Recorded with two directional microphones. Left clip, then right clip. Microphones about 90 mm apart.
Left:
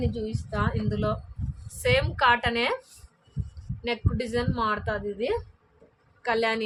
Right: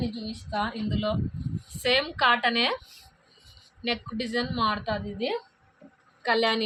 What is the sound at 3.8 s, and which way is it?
A woman's voice, 45° left (ahead or behind).